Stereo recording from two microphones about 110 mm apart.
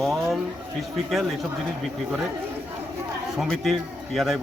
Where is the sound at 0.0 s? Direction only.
Centre (ahead or behind).